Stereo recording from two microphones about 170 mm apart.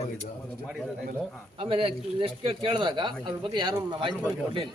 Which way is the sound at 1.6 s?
30° right (ahead or behind).